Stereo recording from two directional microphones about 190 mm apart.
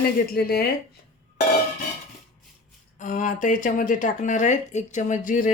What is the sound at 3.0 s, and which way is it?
Speech, 45° left (ahead or behind).